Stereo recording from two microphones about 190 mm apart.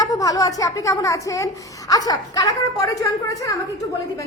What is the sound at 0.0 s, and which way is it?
A woman's voice, 20° left (ahead or behind).